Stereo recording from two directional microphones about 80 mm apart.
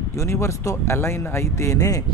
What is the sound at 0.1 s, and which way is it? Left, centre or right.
Speech, left.